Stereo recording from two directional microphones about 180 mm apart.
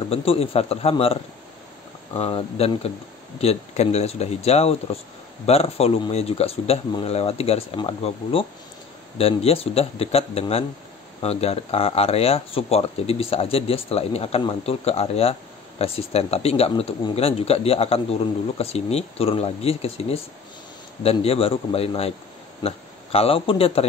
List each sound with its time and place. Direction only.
0.1 s a man's voice: 30° left (ahead or behind)